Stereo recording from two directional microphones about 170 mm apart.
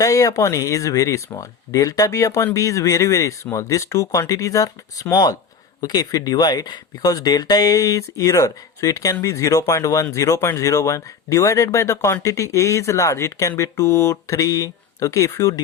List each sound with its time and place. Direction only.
0.0 s speech: 20° left (ahead or behind)